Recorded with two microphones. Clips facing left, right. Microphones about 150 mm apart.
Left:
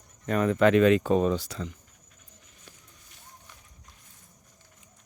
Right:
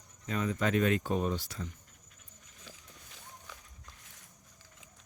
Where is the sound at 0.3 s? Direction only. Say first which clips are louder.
Left 10 dB; 65° left (ahead or behind); by 1.7 s 90° left.